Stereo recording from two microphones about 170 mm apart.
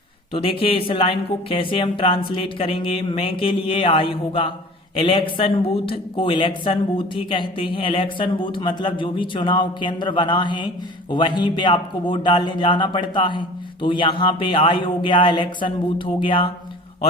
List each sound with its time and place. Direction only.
0.3 s speech: 30° left (ahead or behind)